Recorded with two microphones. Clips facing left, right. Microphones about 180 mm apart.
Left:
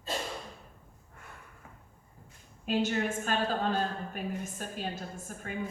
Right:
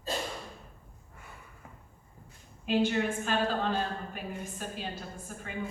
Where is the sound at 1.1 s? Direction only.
Centre (ahead or behind).